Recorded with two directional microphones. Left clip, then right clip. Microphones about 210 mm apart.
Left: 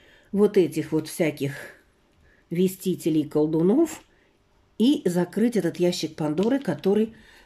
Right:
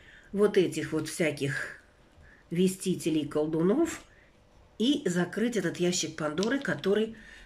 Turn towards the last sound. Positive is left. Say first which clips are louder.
# left 4 dB
turn(degrees=20)  # may be behind; listen again after turning